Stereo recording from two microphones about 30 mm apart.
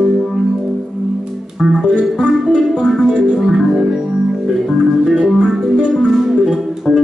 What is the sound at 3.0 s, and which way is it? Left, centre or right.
Music, right.